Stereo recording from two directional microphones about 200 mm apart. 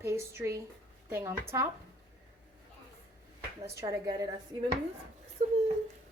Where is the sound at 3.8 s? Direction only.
15° right (ahead or behind).